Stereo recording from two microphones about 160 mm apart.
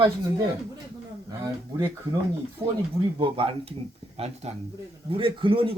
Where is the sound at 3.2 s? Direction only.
35° right (ahead or behind).